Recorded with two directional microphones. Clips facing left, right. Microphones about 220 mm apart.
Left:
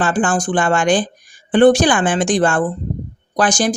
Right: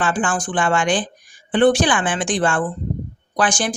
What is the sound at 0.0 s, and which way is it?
A woman's voice, 40° left (ahead or behind).